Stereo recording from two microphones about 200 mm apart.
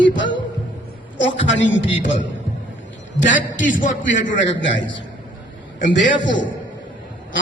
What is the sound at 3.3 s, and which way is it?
Speech, 70° left (ahead or behind).